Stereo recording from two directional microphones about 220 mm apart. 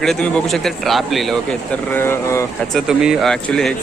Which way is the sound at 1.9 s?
10° left (ahead or behind).